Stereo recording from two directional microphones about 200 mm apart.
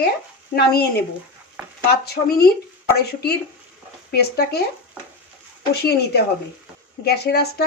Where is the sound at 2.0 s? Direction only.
55° left (ahead or behind).